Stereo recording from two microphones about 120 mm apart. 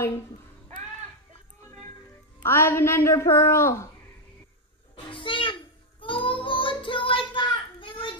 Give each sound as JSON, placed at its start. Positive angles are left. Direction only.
{"t": 2.4, "sound": "a child's voice", "side_deg": 20}
{"t": 4.9, "sound": "child singing", "side_deg": 45}